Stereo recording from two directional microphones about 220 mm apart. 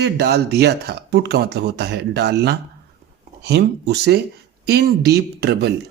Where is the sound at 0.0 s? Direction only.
50° right (ahead or behind).